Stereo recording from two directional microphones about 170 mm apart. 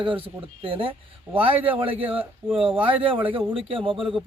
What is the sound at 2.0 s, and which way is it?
Speech, 10° right (ahead or behind).